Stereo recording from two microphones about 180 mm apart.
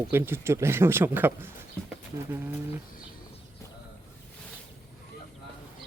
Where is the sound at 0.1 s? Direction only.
15° right (ahead or behind).